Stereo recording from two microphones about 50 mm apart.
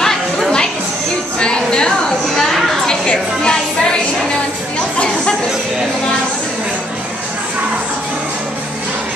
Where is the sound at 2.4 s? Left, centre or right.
Centre.